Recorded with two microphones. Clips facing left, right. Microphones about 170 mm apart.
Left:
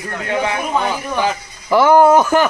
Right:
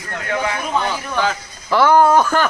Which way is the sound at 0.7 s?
15° left (ahead or behind).